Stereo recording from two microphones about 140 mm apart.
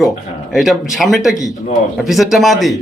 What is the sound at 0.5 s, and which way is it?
A man's voice, centre (ahead or behind).